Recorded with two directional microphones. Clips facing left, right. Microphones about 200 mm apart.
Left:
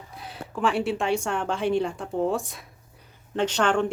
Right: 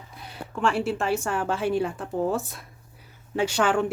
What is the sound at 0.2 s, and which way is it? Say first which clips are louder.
Speech: even; centre (ahead or behind).